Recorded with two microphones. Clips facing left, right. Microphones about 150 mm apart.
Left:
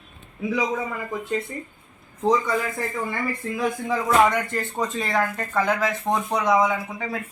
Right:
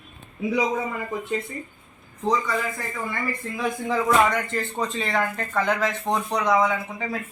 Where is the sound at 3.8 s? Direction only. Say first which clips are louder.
Left 1 dB; 5° left (ahead or behind).